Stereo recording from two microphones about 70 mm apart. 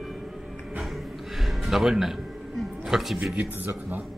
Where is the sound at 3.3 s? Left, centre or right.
Right.